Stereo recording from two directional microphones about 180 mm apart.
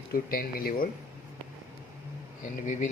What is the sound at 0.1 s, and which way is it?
Speech, 55° left (ahead or behind).